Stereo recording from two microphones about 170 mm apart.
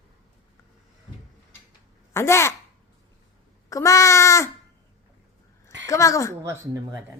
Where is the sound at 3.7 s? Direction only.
20° left (ahead or behind).